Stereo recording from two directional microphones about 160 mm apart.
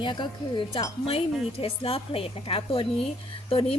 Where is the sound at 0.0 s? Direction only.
30° left (ahead or behind).